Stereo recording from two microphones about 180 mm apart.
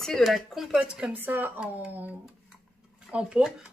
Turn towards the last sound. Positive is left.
turn(degrees=-5)  # may be behind; listen again after turning